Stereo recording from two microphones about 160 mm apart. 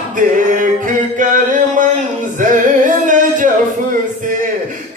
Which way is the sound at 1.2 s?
55° right (ahead or behind).